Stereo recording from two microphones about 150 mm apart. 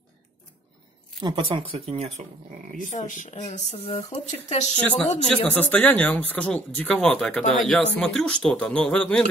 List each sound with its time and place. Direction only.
1.2 s speech: 35° right (ahead or behind)
2.9 s speech: 55° left (ahead or behind)
5.5 s speech: 10° left (ahead or behind)